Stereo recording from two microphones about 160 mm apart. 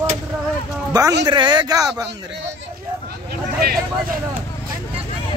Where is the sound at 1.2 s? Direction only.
30° right (ahead or behind).